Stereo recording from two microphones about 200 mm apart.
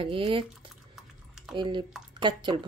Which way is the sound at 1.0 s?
Centre (ahead or behind).